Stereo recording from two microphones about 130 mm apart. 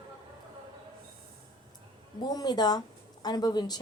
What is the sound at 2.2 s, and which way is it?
A woman's voice, 30° left (ahead or behind).